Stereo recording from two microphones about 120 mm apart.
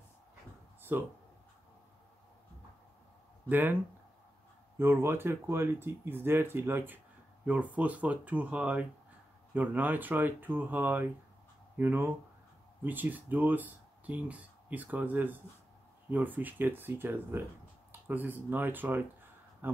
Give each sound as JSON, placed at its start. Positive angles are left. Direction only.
{"t": 0.9, "sound": "speech", "side_deg": -20}
{"t": 3.4, "sound": "speech", "side_deg": -15}
{"t": 4.7, "sound": "speech", "side_deg": -20}